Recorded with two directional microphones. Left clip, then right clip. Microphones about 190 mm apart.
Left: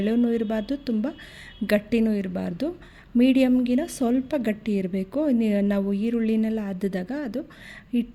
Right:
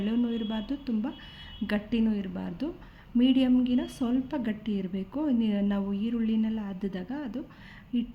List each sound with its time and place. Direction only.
0.0 s a woman's voice: 40° left (ahead or behind)